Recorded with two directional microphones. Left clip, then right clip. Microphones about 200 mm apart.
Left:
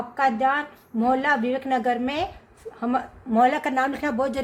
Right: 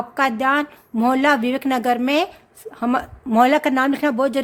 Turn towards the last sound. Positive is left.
turn(degrees=-40)  # may be behind; listen again after turning